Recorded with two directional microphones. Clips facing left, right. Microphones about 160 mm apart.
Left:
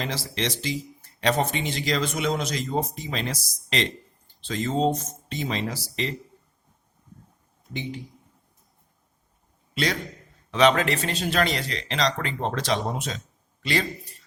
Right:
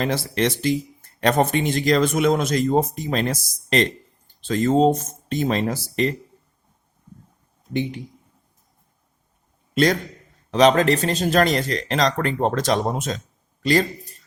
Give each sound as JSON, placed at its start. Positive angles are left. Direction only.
{"t": 0.0, "sound": "speech", "side_deg": -50}
{"t": 7.7, "sound": "speech", "side_deg": -60}
{"t": 9.7, "sound": "speech", "side_deg": -45}